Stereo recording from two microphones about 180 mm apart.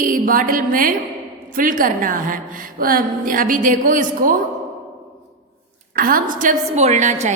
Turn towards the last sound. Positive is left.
turn(degrees=-40)  # may be behind; listen again after turning